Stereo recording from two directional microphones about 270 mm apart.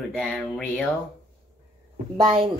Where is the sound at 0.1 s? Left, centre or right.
Centre.